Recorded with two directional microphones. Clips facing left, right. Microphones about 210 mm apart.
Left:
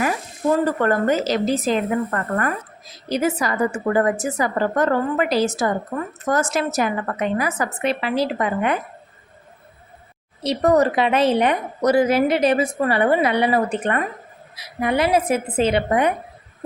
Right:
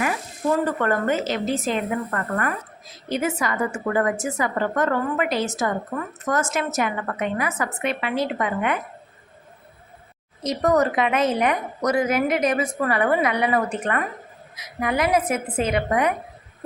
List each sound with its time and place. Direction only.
0.8 s a woman's voice: 35° left (ahead or behind)
10.4 s a woman's voice: 30° left (ahead or behind)